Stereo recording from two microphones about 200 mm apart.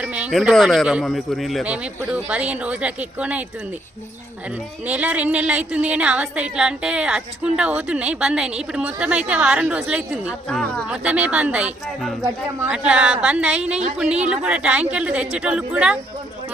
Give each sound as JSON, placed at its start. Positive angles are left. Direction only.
{"t": 0.0, "sound": "speech", "side_deg": -5}
{"t": 4.9, "sound": "a woman's voice", "side_deg": -5}